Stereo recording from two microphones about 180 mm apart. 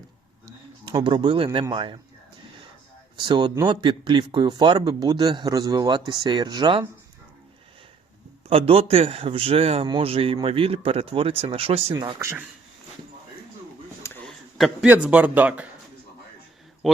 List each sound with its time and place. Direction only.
0.4 s a sound: 25° right (ahead or behind)
1.7 s speech: 25° right (ahead or behind)
3.2 s speech: 25° right (ahead or behind)
8.4 s a man's voice: 30° right (ahead or behind)
11.9 s speech: 20° right (ahead or behind)
14.3 s a man's voice: centre (ahead or behind)
16.8 s speech: centre (ahead or behind)